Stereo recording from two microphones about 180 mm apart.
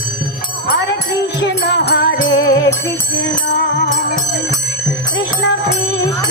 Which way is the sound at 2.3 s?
85° left.